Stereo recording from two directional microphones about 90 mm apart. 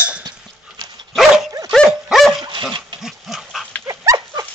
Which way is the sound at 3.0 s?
5° right (ahead or behind).